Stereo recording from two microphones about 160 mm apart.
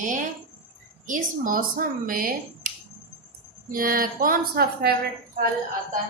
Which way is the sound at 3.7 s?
65° right (ahead or behind).